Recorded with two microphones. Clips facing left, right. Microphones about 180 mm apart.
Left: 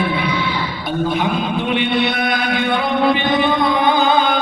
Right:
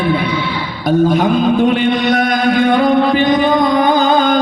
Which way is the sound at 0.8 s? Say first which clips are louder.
Right 8 dB; 45° right (ahead or behind).